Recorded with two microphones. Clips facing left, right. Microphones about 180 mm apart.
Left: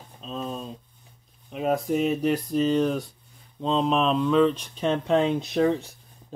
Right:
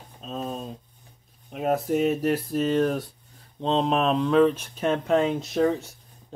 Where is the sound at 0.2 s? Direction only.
40° right (ahead or behind).